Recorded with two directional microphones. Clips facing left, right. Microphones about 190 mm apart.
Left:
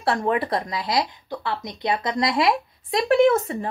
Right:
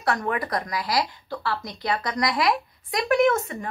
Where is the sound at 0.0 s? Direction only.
30° left (ahead or behind).